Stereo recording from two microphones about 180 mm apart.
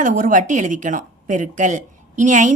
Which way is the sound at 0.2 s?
45° right (ahead or behind).